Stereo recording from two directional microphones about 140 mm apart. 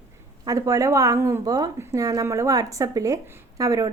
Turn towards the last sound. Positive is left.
turn(degrees=-25)  # may be behind; listen again after turning